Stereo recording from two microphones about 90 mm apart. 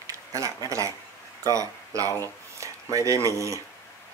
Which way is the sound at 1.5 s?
40° right (ahead or behind).